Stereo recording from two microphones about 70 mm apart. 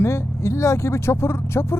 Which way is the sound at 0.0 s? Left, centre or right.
Left.